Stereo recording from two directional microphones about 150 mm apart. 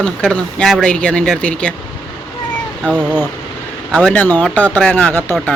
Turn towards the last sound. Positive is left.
turn(degrees=10)  # may be behind; listen again after turning